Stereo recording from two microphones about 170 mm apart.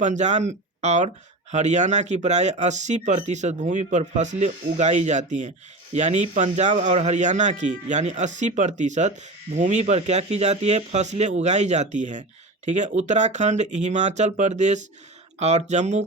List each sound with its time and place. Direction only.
0.0 s speech: 45° right (ahead or behind)